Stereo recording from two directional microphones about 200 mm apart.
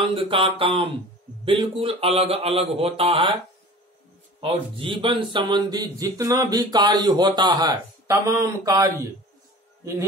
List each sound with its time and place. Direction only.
0.0 s speech: 25° right (ahead or behind)
4.4 s speech: 25° right (ahead or behind)